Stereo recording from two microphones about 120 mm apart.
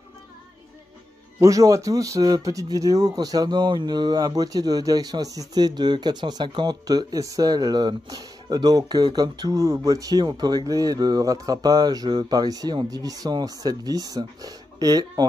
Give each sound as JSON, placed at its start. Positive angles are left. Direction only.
{"t": 1.4, "sound": "speech", "side_deg": -30}